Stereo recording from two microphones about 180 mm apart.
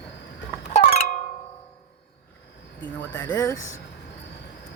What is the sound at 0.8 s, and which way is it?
Music, 35° left (ahead or behind).